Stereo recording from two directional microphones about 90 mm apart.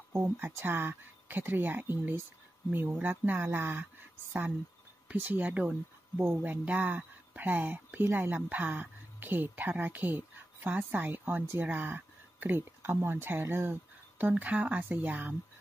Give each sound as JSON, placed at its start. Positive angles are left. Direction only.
{"t": 0.1, "sound": "speech", "side_deg": -25}
{"t": 5.0, "sound": "a woman's voice", "side_deg": -20}